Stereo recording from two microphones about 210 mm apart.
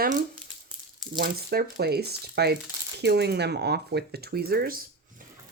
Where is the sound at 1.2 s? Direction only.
50° right (ahead or behind).